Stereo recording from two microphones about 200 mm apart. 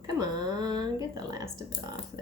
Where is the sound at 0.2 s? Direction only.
20° right (ahead or behind).